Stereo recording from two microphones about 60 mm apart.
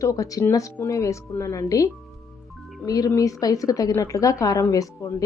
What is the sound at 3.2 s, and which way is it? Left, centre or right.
Speech, left.